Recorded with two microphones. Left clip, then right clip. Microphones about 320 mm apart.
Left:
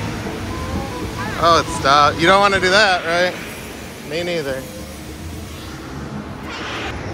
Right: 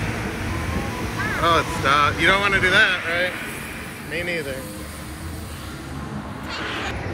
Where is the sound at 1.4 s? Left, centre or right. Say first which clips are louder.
Left 5 dB; centre.